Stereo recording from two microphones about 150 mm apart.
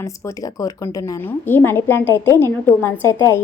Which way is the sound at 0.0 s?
20° left (ahead or behind).